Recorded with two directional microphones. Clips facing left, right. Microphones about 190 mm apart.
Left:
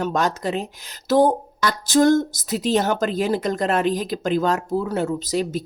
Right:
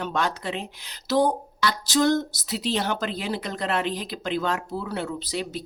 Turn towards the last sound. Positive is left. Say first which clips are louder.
# left 7 dB
turn(degrees=45)  # may be behind; listen again after turning